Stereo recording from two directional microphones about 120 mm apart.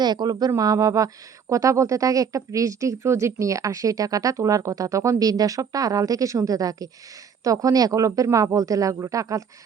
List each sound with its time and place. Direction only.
0.0 s a woman's voice: 35° right (ahead or behind)